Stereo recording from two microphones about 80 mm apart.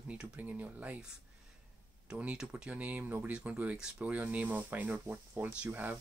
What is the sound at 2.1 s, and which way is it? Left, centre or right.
Speech, centre.